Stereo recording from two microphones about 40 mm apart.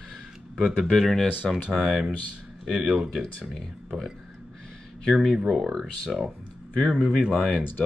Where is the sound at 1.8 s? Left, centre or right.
Centre.